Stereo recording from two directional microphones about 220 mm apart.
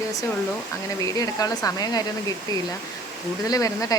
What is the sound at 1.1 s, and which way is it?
Speech, 15° left (ahead or behind).